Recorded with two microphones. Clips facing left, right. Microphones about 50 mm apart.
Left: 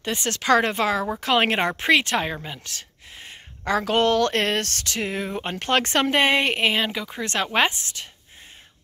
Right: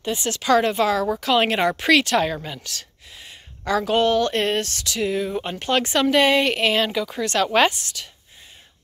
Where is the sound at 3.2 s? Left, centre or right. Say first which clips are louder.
Left 1 dB; left.